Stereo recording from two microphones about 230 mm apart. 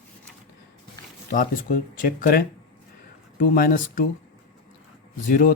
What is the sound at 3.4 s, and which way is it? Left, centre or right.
Speech, left.